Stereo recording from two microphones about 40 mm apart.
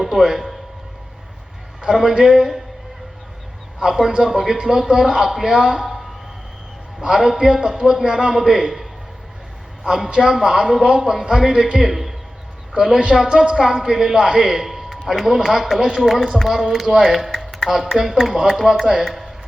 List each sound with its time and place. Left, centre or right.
0.0 s a sound: centre
1.8 s a man's voice: centre
3.8 s a man's voice: centre
7.0 s a man's voice: centre
13.6 s a man's voice: centre